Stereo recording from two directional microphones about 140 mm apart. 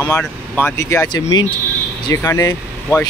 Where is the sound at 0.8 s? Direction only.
25° left (ahead or behind).